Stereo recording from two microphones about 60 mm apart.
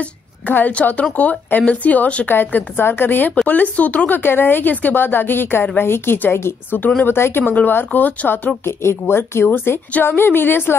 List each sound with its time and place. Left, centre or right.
0.0 s a woman's voice: left
4.2 s speech: left
7.4 s speech: left
8.6 s speech: left